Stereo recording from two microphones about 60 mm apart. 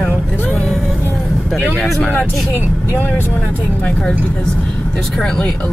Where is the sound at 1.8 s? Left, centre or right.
Centre.